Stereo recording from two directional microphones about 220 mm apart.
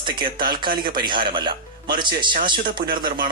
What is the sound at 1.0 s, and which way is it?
Speech, 20° right (ahead or behind).